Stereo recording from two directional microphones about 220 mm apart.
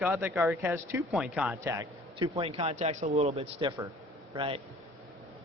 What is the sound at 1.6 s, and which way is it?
A man's voice, 15° right (ahead or behind).